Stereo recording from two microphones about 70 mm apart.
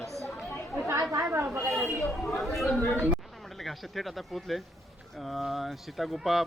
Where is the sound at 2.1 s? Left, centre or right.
Centre.